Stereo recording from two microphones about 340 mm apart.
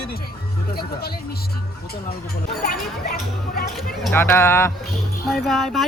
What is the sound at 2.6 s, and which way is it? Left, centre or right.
Speech, left.